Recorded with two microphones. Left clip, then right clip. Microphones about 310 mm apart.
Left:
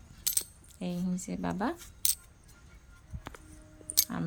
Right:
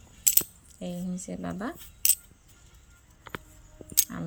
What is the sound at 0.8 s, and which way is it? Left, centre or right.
Speech, centre.